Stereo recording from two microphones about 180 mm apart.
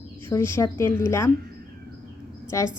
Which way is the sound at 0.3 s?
15° left (ahead or behind).